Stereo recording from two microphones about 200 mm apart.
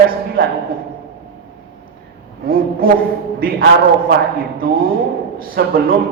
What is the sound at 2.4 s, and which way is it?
A man's voice, 45° right (ahead or behind).